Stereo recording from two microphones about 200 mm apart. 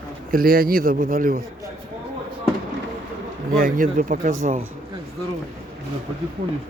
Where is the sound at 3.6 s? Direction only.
40° right (ahead or behind).